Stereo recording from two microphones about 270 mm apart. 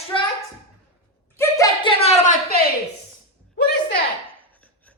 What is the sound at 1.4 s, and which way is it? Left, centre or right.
Speech, centre.